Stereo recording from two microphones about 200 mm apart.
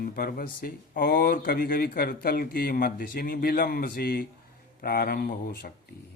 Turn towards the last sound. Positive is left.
turn(degrees=45)  # may be behind; listen again after turning